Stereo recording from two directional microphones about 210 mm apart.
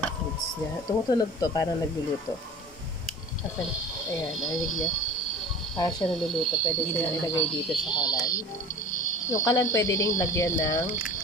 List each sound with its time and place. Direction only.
0.8 s speech: 20° left (ahead or behind)
4.3 s speech: centre (ahead or behind)
5.8 s speech: 20° left (ahead or behind)
6.0 s speech: centre (ahead or behind)
6.6 s speech: 20° left (ahead or behind)
7.4 s speech: centre (ahead or behind)
7.9 s speech: 20° left (ahead or behind)